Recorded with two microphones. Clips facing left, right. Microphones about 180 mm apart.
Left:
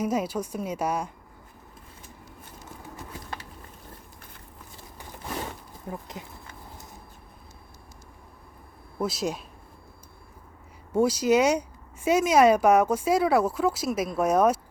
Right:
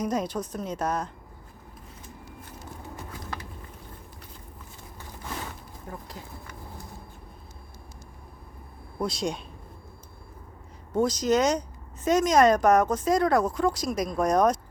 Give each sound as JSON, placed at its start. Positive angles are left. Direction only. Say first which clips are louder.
{"t": 0.0, "sound": "speech", "louder": "left 1 dB", "side_deg": 5}
{"t": 5.9, "sound": "a sound", "louder": "left 3 dB", "side_deg": 20}
{"t": 9.0, "sound": "speech", "louder": "left 1 dB", "side_deg": 5}
{"t": 10.9, "sound": "speech", "louder": "left 2 dB", "side_deg": 10}